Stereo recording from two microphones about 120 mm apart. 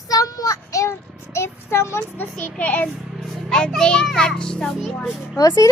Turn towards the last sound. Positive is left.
turn(degrees=30)  # may be behind; listen again after turning